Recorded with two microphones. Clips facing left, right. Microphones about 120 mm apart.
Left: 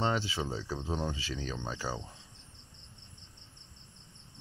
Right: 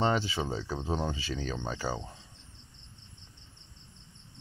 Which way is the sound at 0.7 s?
45° right (ahead or behind).